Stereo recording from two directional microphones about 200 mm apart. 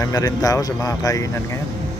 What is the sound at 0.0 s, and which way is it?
Speech, 15° left (ahead or behind).